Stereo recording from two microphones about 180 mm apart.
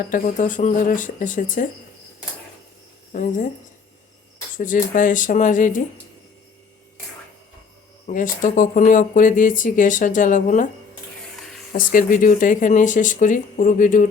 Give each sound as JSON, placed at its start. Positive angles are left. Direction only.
{"t": 0.1, "sound": "speech", "side_deg": 45}
{"t": 3.1, "sound": "speech", "side_deg": 45}
{"t": 4.5, "sound": "speech", "side_deg": 45}
{"t": 8.0, "sound": "speech", "side_deg": 45}
{"t": 11.7, "sound": "speech", "side_deg": 50}